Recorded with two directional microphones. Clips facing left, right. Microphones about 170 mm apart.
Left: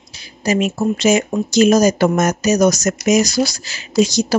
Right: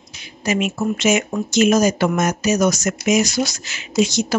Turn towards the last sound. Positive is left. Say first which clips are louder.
# left 3 dB
turn(degrees=35)  # may be behind; listen again after turning